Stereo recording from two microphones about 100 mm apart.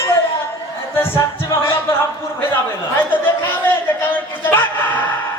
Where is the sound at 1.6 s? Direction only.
25° left (ahead or behind).